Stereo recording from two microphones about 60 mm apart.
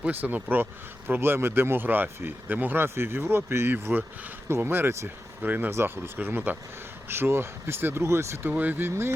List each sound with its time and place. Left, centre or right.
0.0 s speech: right
5.0 s speech: right
7.1 s speech: right
8.4 s speech: right